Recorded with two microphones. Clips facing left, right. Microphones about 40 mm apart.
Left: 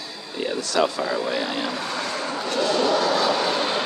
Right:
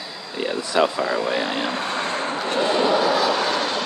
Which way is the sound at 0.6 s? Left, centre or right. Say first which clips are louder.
Right 2 dB; right.